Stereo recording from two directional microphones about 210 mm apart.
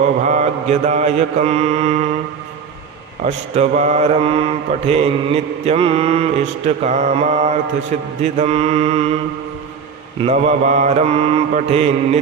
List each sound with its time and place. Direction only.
0.3 s mantra: 35° right (ahead or behind)
3.2 s mantra: 30° right (ahead or behind)
10.2 s mantra: 30° right (ahead or behind)